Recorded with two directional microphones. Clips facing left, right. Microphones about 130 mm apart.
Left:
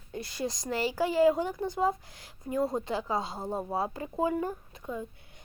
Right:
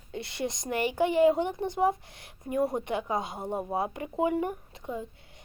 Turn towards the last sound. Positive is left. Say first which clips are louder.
# right 1 dB
turn(degrees=-20)  # may be behind; listen again after turning